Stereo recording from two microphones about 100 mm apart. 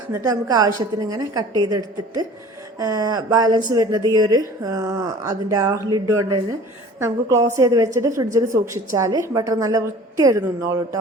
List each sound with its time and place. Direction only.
0.1 s a woman's voice: 40° right (ahead or behind)